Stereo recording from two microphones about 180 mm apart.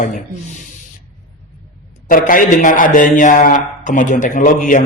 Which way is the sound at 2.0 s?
50° left (ahead or behind).